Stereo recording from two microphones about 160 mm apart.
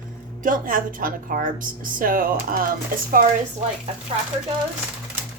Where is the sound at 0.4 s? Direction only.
55° right (ahead or behind).